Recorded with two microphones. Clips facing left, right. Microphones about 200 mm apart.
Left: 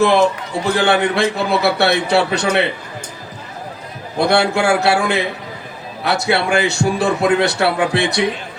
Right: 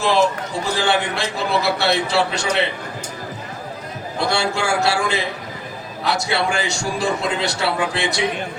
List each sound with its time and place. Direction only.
0.0 s a man's voice: 60° left (ahead or behind)
4.3 s a man's voice: 60° left (ahead or behind)